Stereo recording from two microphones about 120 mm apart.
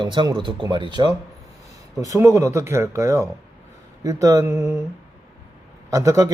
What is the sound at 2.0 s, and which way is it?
A man's voice, 25° right (ahead or behind).